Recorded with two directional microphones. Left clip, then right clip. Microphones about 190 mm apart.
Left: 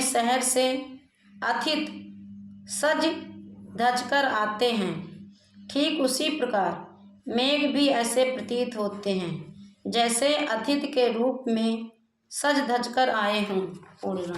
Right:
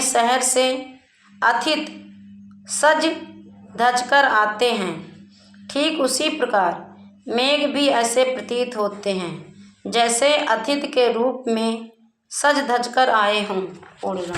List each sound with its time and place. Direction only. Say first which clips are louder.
0.0 s a woman's voice: right 6 dB; 15° left (ahead or behind)